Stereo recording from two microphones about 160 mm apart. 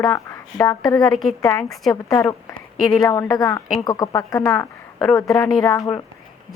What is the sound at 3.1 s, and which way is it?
A woman's voice, 20° left (ahead or behind).